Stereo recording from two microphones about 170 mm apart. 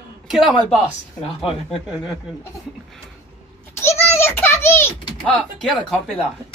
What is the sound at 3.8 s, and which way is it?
Typing, 15° left (ahead or behind).